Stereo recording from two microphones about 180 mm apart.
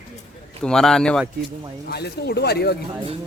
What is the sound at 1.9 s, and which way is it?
Speech, 65° left (ahead or behind).